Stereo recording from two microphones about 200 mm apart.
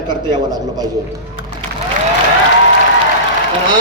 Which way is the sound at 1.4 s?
70° left (ahead or behind).